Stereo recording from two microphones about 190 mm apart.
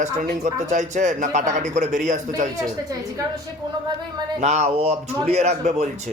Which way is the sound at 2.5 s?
20° right (ahead or behind).